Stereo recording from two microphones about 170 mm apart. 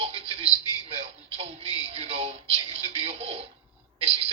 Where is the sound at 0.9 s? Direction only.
35° right (ahead or behind).